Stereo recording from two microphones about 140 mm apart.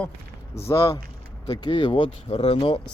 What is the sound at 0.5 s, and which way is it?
Speech, 20° left (ahead or behind).